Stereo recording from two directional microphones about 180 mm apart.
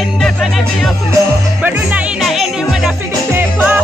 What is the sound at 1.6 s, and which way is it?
Music, 10° right (ahead or behind).